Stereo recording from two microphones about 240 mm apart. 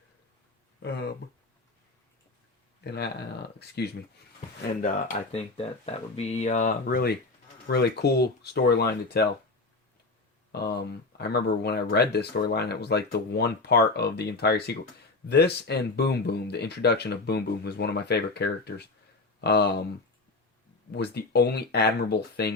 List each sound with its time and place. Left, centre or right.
0.8 s a sound: left
2.8 s speech: left
5.3 s speech: left
10.5 s speech: left
20.9 s speech: left